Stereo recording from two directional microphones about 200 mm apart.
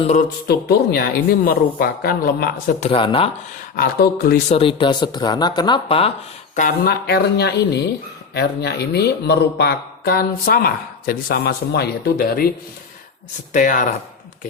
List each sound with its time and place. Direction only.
0.4 s speech: 50° left (ahead or behind)
2.8 s speech: 25° left (ahead or behind)
3.8 s speech: 50° left (ahead or behind)
4.5 s speech: 25° left (ahead or behind)
6.6 s speech: 45° left (ahead or behind)
13.5 s speech: 40° left (ahead or behind)